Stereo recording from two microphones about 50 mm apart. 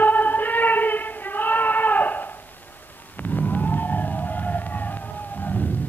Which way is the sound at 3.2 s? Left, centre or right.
Left.